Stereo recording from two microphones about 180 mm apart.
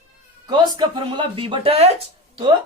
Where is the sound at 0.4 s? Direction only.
25° right (ahead or behind).